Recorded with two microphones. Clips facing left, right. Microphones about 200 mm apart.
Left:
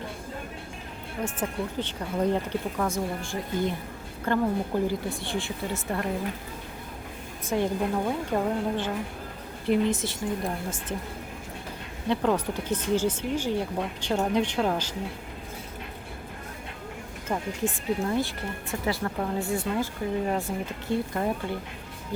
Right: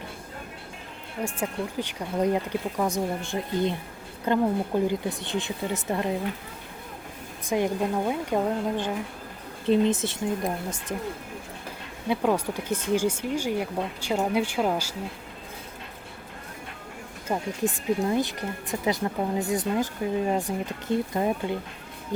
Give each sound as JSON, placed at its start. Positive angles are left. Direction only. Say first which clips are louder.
{"t": 1.2, "sound": "speech", "louder": "right 1 dB", "side_deg": -10}
{"t": 7.4, "sound": "speech", "louder": "right 1 dB", "side_deg": -15}
{"t": 12.0, "sound": "speech", "louder": "right 1 dB", "side_deg": -10}
{"t": 17.2, "sound": "speech", "louder": "right 2 dB", "side_deg": -15}